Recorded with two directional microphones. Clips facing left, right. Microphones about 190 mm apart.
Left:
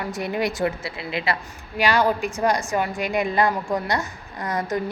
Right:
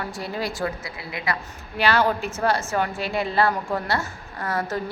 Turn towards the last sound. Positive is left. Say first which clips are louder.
# left 1 dB
turn(degrees=15)  # may be behind; listen again after turning